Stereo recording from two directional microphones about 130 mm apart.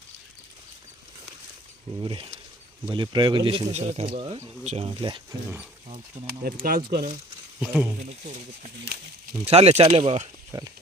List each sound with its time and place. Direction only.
2.0 s speech: 40° right (ahead or behind)
3.7 s speech: 60° right (ahead or behind)
4.6 s speech: 60° right (ahead or behind)
4.9 s speech: 40° right (ahead or behind)
6.2 s speech: 60° right (ahead or behind)
6.6 s speech: 90° right
7.6 s speech: 10° right (ahead or behind)
9.4 s speech: 50° right (ahead or behind)
10.5 s speech: 25° right (ahead or behind)